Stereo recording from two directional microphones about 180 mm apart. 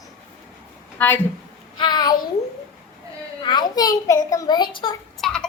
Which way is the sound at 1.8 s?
25° left (ahead or behind).